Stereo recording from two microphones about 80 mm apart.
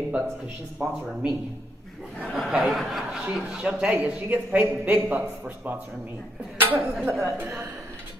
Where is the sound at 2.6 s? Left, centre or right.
Centre; by 5.8 s right.